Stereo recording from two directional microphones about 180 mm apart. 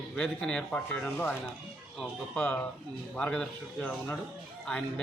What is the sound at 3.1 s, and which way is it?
A man's voice, 5° left (ahead or behind).